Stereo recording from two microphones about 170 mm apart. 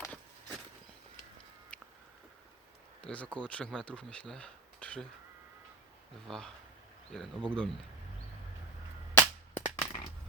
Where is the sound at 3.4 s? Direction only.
5° left (ahead or behind).